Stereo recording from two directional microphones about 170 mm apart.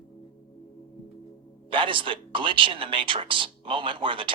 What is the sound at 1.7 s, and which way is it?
Speech, 30° right (ahead or behind).